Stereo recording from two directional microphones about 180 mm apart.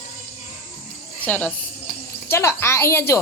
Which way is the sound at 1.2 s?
10° left (ahead or behind).